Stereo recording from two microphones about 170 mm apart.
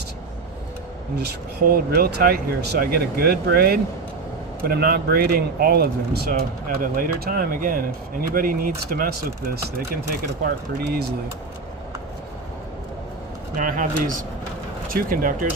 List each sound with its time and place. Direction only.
1.2 s speech: 65° right (ahead or behind)
13.6 s speech: 50° right (ahead or behind)
14.8 s speech: 55° right (ahead or behind)